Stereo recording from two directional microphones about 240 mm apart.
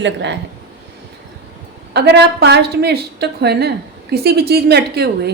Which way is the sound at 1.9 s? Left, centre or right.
Right.